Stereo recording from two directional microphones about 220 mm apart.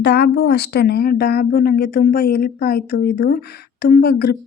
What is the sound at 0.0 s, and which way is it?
Speech, 50° left (ahead or behind).